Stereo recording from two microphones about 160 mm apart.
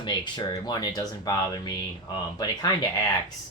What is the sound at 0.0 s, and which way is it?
Speech, 25° left (ahead or behind).